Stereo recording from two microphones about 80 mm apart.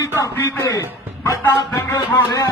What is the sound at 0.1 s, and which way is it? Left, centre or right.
A man's voice, left.